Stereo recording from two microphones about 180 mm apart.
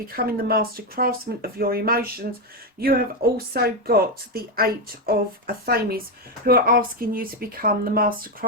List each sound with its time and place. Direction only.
0.2 s speech: 55° right (ahead or behind)